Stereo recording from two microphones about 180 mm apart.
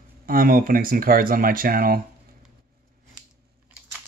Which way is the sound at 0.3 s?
50° right (ahead or behind).